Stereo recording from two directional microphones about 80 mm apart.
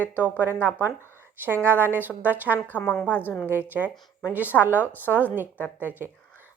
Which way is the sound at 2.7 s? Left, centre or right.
Left.